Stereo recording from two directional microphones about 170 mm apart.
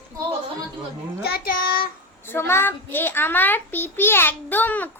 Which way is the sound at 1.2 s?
65° left (ahead or behind).